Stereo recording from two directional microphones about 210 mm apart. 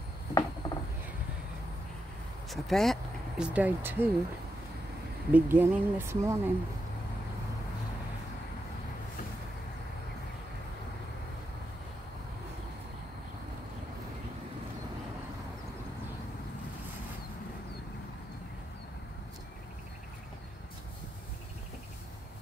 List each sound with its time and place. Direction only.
0.3 s a sound: 20° left (ahead or behind)
2.5 s speech: centre (ahead or behind)
5.3 s speech: 10° right (ahead or behind)